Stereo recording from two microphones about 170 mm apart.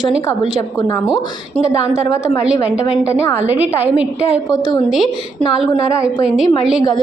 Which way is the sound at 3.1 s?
10° right (ahead or behind).